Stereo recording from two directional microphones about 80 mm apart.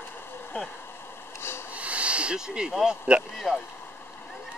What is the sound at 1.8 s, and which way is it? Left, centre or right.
Hiss, centre.